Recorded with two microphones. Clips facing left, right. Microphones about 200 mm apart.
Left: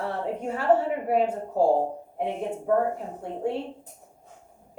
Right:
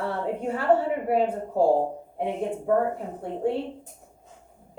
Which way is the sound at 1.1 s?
30° right (ahead or behind).